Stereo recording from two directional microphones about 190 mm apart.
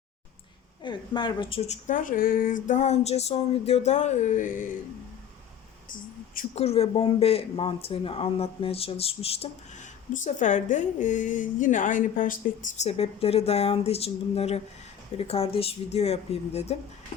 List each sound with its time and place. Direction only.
0.8 s speech: 25° left (ahead or behind); by 4.6 s 45° left (ahead or behind)
6.5 s speech: 35° left (ahead or behind)